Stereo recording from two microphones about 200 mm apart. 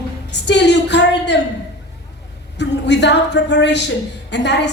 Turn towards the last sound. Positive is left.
turn(degrees=60)  # may be behind; listen again after turning